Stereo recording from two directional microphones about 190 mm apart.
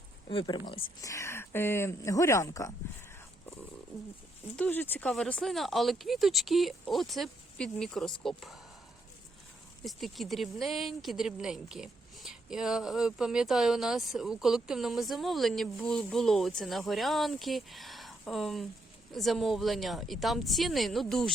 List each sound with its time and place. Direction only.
0.3 s speech: 25° left (ahead or behind)
4.5 s speech: 10° left (ahead or behind)
9.8 s speech: centre (ahead or behind)